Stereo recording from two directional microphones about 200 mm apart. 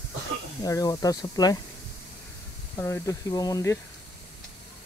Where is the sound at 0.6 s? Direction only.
20° left (ahead or behind).